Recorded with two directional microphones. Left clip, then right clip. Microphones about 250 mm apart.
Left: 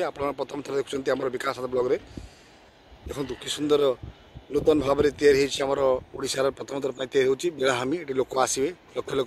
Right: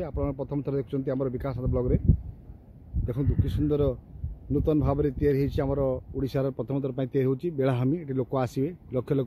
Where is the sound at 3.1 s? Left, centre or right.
Centre.